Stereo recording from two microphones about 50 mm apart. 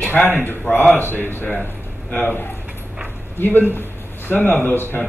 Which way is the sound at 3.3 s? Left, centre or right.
Left.